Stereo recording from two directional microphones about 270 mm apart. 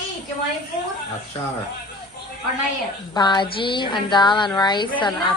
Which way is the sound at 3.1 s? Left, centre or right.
Centre.